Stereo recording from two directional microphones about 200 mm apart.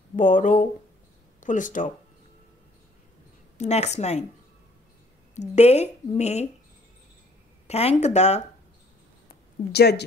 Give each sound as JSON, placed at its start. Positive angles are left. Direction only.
{"t": 0.1, "sound": "a woman's voice", "side_deg": 40}
{"t": 3.5, "sound": "a woman's voice", "side_deg": 35}
{"t": 5.3, "sound": "a woman's voice", "side_deg": 35}
{"t": 7.6, "sound": "a woman's voice", "side_deg": 30}
{"t": 9.3, "sound": "a sound", "side_deg": 55}